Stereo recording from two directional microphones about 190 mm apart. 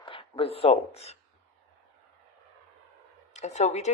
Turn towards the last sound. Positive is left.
turn(degrees=35)  # may be behind; listen again after turning